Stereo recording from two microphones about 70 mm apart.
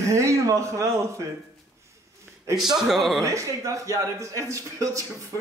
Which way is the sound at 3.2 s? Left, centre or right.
Right.